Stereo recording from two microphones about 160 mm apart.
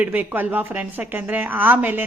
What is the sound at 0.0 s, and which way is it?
Speech, 10° right (ahead or behind).